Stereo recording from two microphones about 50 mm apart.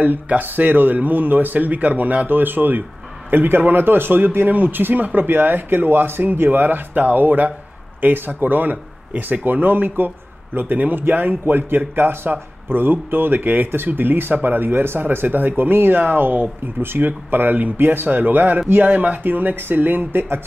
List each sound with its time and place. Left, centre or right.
0.0 s speech: right